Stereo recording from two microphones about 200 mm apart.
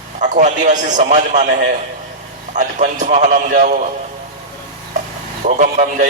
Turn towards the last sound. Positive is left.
turn(degrees=-40)  # may be behind; listen again after turning